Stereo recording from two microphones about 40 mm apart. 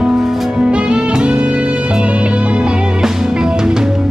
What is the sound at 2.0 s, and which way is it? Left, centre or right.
Music, right.